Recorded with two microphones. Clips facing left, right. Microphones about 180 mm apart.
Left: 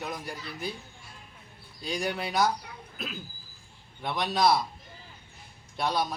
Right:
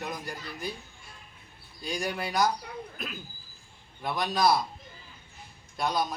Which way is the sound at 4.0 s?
Centre (ahead or behind).